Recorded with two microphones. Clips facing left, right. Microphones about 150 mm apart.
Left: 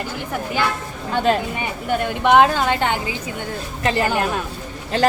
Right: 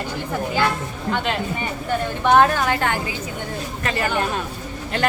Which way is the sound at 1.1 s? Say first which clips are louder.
Left 6 dB; 40° left (ahead or behind).